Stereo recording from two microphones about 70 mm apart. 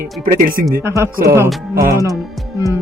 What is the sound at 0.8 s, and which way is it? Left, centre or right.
Speech, right.